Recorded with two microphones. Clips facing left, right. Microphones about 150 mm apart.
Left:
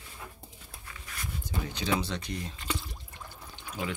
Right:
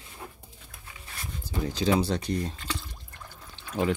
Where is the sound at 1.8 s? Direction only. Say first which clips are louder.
Right 6 dB; 35° right (ahead or behind).